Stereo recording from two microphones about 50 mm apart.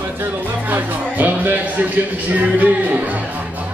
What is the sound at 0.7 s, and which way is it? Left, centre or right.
Speech, right.